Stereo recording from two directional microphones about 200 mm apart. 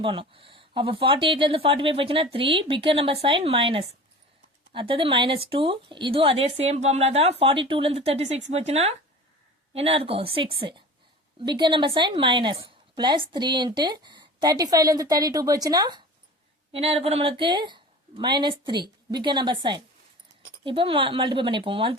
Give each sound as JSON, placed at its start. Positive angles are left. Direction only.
{"t": 0.0, "sound": "a woman's voice", "side_deg": -25}